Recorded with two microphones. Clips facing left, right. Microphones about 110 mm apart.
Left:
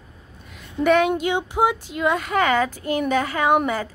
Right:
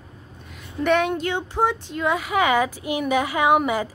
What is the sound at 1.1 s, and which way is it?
Speech, 15° left (ahead or behind).